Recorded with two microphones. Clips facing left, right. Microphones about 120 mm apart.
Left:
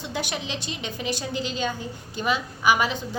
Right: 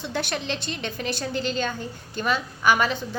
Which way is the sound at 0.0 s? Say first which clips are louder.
Right 2 dB; 15° left (ahead or behind).